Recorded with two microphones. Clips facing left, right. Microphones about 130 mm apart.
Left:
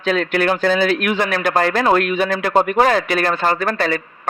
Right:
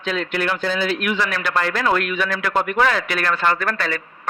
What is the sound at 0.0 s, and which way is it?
Speech, 50° left (ahead or behind).